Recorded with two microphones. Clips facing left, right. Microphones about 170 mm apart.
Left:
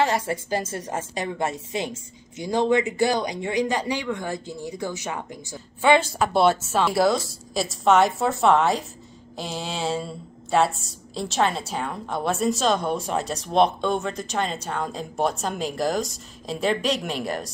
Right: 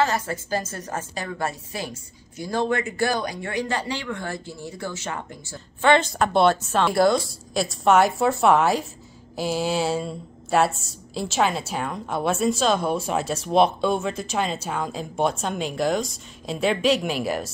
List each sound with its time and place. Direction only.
0.0 s a woman's voice: 25° left (ahead or behind); by 17.5 s 5° right (ahead or behind)